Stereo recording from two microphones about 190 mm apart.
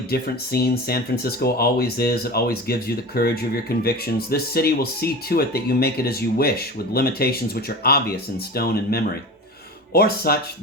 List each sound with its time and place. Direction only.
0.1 s speech: 55° left (ahead or behind)